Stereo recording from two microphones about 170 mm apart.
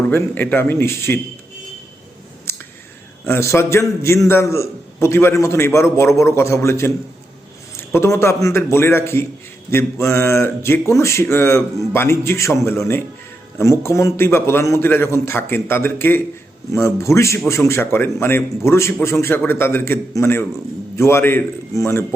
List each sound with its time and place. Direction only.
0.1 s a man's voice: 10° left (ahead or behind)
2.5 s clicking: 15° left (ahead or behind)
3.2 s a man's voice: 15° left (ahead or behind)
7.9 s a man's voice: 15° left (ahead or behind)